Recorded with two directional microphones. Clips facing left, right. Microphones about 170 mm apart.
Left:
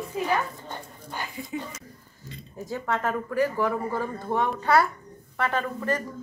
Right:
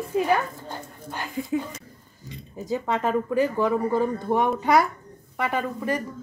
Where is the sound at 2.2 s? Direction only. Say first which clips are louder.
Right 2 dB; 15° right (ahead or behind).